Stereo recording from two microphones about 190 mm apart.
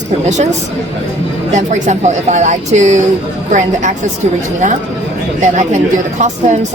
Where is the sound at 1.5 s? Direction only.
40° right (ahead or behind).